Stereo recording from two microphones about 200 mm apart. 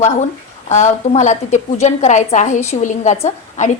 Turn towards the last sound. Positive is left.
turn(degrees=35)  # may be behind; listen again after turning